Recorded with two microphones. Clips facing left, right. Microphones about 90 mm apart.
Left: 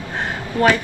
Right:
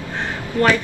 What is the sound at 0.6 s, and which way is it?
Speech, 20° left (ahead or behind).